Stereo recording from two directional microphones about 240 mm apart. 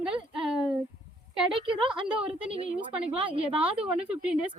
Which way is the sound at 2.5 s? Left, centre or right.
Right.